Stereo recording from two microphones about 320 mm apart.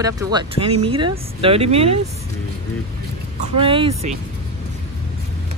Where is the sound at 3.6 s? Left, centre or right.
Centre.